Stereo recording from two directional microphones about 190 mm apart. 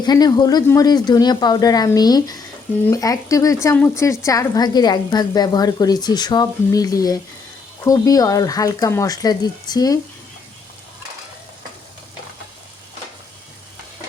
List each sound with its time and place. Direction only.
0.0 s a woman's voice: 20° left (ahead or behind)